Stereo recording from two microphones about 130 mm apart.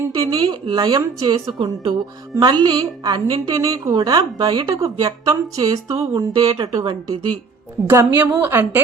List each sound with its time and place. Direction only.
0.3 s a woman's voice: 30° right (ahead or behind)
3.5 s a woman's voice: 25° right (ahead or behind)
7.9 s a woman's voice: 15° right (ahead or behind)